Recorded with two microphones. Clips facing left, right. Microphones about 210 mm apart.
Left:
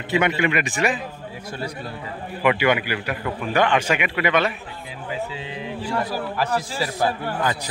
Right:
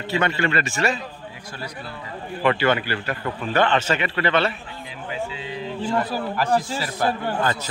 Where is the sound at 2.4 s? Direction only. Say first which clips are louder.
Left 1 dB; 15° left (ahead or behind).